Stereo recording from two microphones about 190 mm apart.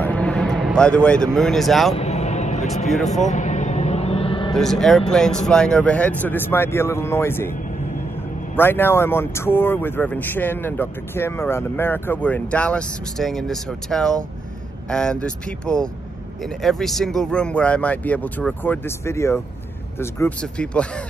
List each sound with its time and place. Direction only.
0.0 s speech: 5° left (ahead or behind)
2.0 s a sound: 35° left (ahead or behind)
4.6 s speech: centre (ahead or behind)
8.5 s speech: 10° left (ahead or behind)